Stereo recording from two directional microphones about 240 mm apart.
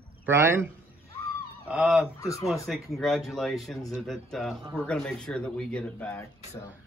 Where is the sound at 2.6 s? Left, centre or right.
Centre.